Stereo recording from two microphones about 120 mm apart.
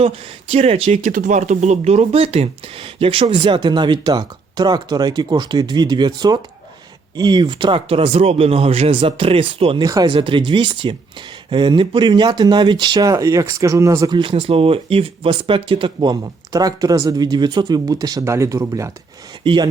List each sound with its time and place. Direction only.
0.5 s speech: 55° right (ahead or behind)
0.9 s speech: 90° right; by 9.8 s 50° right (ahead or behind)
9.8 s speech: 35° right (ahead or behind)
14.1 s speech: 45° right (ahead or behind); by 18.9 s 25° right (ahead or behind)
19.4 s speech: 40° right (ahead or behind)